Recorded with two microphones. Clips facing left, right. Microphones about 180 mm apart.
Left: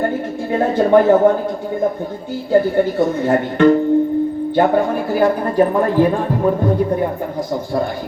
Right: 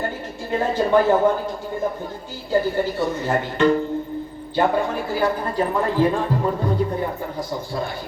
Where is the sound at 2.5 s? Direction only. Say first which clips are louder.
Left 6 dB; 55° left (ahead or behind).